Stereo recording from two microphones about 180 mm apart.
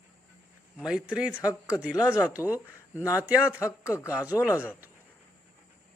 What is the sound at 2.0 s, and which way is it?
Speech, 15° left (ahead or behind).